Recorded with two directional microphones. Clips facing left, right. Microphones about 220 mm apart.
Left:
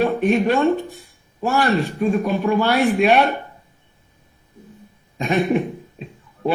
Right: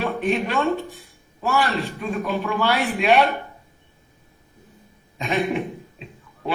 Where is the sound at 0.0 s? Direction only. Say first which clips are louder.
Left 6 dB; 45° left (ahead or behind).